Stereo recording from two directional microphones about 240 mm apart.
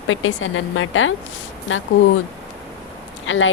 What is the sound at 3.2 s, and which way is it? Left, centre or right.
Speech, left.